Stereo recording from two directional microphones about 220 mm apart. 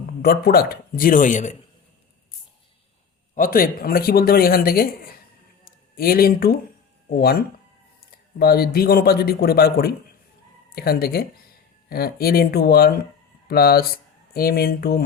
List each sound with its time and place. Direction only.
0.2 s a man's voice: 45° left (ahead or behind)
3.3 s speech: 40° left (ahead or behind)